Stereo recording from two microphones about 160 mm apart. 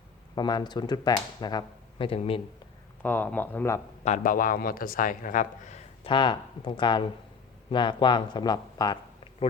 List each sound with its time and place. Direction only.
0.3 s speech: 25° left (ahead or behind)
3.0 s speech: 10° left (ahead or behind)
4.0 s speech: 55° left (ahead or behind)
6.1 s speech: 30° left (ahead or behind)